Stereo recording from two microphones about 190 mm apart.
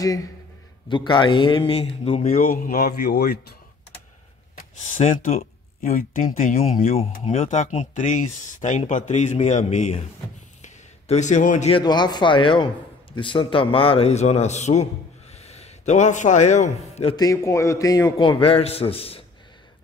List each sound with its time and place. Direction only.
0.8 s a man's voice: 25° left (ahead or behind)
2.3 s speech: 45° left (ahead or behind)
4.6 s speech: 40° left (ahead or behind)
10.6 s a sound: 40° left (ahead or behind)
11.7 s a man's voice: 20° left (ahead or behind)
17.2 s a man's voice: 15° left (ahead or behind)